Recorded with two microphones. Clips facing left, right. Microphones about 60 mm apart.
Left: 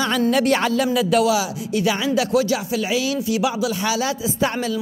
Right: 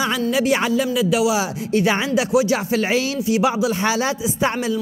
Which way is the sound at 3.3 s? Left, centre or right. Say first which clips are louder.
Right 5 dB; right.